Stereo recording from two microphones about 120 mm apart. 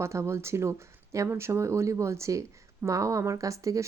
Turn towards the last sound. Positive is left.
turn(degrees=-25)  # may be behind; listen again after turning